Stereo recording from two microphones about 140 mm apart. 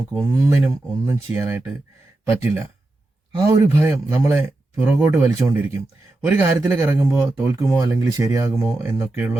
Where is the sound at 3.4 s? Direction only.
20° right (ahead or behind).